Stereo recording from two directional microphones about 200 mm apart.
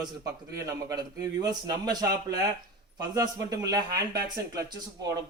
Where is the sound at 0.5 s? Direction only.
15° right (ahead or behind).